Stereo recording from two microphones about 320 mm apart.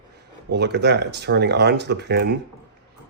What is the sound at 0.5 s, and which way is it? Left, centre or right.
A man's voice, right.